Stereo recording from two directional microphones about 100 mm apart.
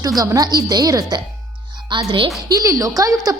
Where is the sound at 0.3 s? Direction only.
40° right (ahead or behind).